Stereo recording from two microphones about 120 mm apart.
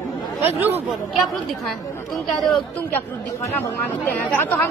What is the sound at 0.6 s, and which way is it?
Speech, 15° right (ahead or behind).